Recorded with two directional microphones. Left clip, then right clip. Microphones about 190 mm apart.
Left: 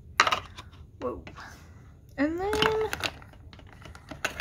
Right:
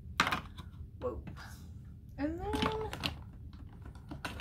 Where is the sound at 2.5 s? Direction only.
50° left (ahead or behind).